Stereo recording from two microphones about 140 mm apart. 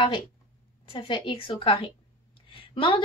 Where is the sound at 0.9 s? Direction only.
35° left (ahead or behind).